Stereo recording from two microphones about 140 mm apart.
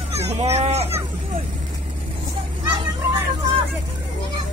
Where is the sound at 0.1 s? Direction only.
50° right (ahead or behind).